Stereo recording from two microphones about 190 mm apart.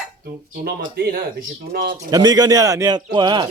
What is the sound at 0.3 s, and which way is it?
Speech, 50° right (ahead or behind).